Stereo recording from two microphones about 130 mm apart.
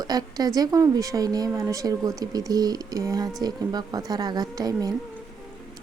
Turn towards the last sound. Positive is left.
turn(degrees=-30)  # may be behind; listen again after turning